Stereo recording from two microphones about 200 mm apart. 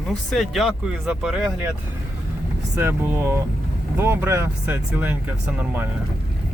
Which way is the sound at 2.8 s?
10° right (ahead or behind).